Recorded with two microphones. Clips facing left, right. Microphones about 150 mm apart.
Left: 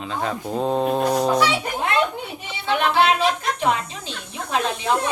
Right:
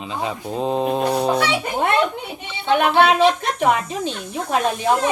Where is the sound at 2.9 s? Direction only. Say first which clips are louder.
Right 4 dB; 60° right (ahead or behind).